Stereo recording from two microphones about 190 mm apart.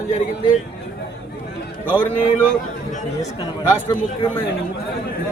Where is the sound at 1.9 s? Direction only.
5° left (ahead or behind).